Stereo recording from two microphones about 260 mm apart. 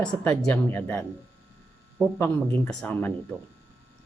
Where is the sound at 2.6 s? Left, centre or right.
Centre.